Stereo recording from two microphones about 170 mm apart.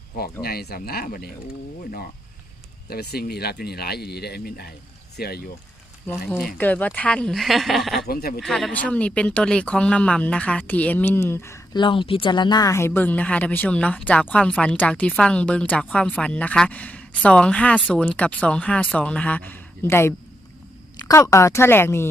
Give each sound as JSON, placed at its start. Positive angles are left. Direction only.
{"t": 0.4, "sound": "speech", "side_deg": 65}
{"t": 6.1, "sound": "speech", "side_deg": 10}
{"t": 8.0, "sound": "speech", "side_deg": 65}
{"t": 8.4, "sound": "speech", "side_deg": 0}
{"t": 11.8, "sound": "speech", "side_deg": 30}